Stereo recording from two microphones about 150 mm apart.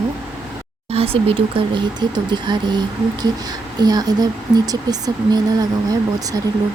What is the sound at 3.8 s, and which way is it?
Speech, 25° right (ahead or behind).